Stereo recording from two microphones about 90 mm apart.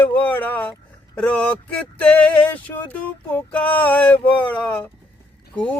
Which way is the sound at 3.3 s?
20° left (ahead or behind).